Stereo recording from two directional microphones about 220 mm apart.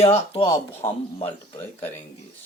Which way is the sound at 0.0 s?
30° left (ahead or behind).